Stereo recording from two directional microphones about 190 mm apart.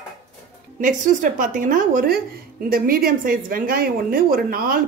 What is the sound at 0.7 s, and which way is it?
A woman's voice, 45° right (ahead or behind).